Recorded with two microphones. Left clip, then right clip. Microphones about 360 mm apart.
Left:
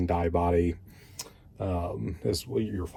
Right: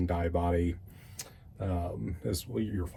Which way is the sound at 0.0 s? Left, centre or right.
Centre.